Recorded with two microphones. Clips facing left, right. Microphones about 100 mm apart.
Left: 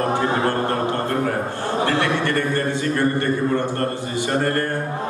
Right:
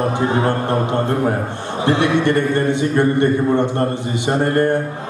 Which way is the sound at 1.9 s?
20° right (ahead or behind).